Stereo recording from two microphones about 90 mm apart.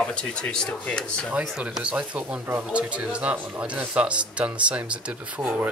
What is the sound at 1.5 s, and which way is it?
A man's voice, 5° right (ahead or behind).